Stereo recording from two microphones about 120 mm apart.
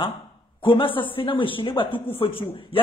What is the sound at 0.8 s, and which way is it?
Speech, 45° left (ahead or behind).